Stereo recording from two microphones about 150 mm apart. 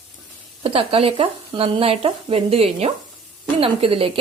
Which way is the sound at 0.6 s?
40° right (ahead or behind).